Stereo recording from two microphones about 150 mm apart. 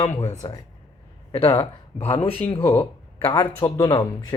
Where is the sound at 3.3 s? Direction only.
25° left (ahead or behind).